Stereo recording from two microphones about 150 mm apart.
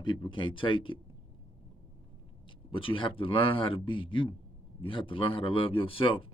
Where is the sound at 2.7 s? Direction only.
35° left (ahead or behind).